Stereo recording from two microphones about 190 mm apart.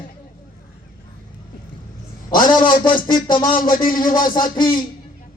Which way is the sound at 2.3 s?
45° left (ahead or behind).